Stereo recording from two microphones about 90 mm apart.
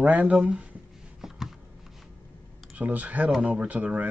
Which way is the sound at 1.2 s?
Centre (ahead or behind).